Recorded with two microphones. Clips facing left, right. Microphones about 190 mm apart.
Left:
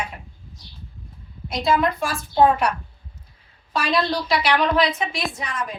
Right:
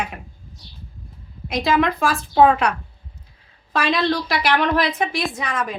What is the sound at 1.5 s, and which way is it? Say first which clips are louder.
Speech: right 2 dB; 90° right.